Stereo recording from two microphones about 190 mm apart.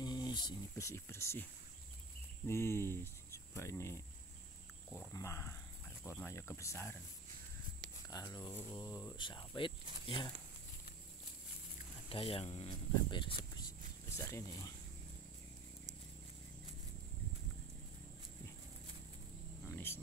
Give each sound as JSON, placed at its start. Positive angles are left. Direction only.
{"t": 0.0, "sound": "speech", "side_deg": 20}
{"t": 2.4, "sound": "speech", "side_deg": 15}
{"t": 5.1, "sound": "speech", "side_deg": 15}
{"t": 8.1, "sound": "speech", "side_deg": 20}
{"t": 8.8, "sound": "speech", "side_deg": 15}
{"t": 12.1, "sound": "speech", "side_deg": 30}
{"t": 13.6, "sound": "a sound", "side_deg": 15}
{"t": 19.7, "sound": "wild animals", "side_deg": 10}